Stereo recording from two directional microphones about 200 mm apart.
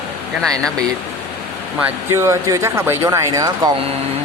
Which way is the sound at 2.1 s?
15° right (ahead or behind).